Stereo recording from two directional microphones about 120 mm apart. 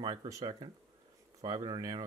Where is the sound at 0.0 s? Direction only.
40° right (ahead or behind).